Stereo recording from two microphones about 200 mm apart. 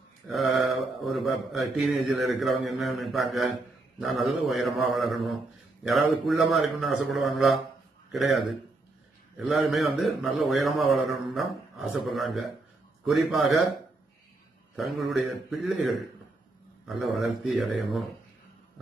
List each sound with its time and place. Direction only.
0.3 s speech: centre (ahead or behind)
14.8 s speech: centre (ahead or behind)